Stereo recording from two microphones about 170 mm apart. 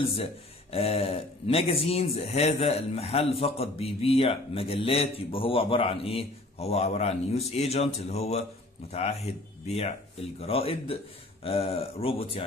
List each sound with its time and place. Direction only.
0.0 s speech: 35° left (ahead or behind)
10.4 s speech: 35° left (ahead or behind)